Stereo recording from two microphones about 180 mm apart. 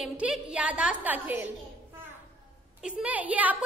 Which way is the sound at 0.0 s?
5° right (ahead or behind).